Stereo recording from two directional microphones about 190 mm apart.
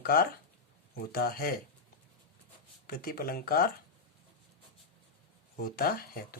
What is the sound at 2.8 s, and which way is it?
Speech, 50° left (ahead or behind).